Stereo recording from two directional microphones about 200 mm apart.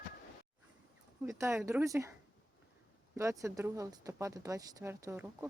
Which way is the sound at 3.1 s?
15° right (ahead or behind).